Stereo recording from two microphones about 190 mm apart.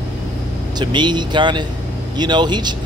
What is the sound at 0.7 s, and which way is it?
Speech, 25° right (ahead or behind).